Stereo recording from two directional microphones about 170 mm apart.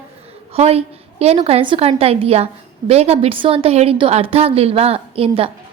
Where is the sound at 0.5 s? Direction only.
35° right (ahead or behind).